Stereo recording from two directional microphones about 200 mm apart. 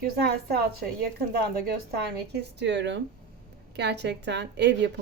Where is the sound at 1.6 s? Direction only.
50° right (ahead or behind).